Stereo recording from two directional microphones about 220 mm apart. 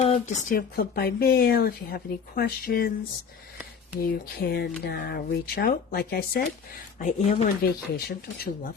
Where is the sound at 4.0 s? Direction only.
45° left (ahead or behind).